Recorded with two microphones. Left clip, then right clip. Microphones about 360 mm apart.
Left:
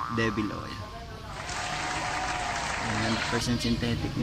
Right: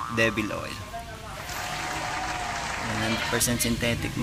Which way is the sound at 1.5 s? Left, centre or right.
Centre.